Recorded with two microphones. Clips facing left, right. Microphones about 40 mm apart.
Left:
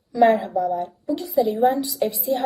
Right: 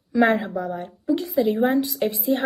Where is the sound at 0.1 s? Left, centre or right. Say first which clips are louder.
Left 2 dB; right.